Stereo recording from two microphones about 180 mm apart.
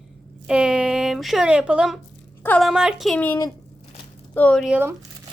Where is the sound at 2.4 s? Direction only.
10° left (ahead or behind).